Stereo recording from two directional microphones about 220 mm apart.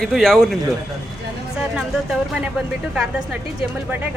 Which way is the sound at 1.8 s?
Centre (ahead or behind).